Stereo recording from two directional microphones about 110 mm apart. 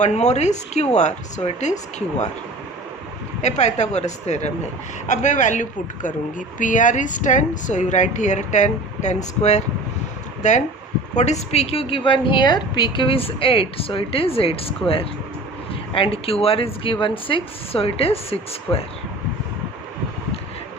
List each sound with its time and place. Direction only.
0.0 s speech: 90° left
3.4 s speech: 90° left
6.9 s speech: 90° left; by 18.9 s 60° left (ahead or behind)